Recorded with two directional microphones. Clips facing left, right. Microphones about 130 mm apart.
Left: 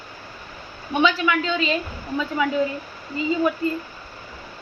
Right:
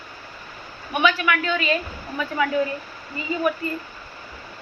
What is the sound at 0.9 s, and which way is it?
A man's voice, 25° left (ahead or behind).